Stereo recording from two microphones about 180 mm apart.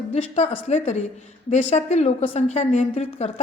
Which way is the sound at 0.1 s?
35° left (ahead or behind).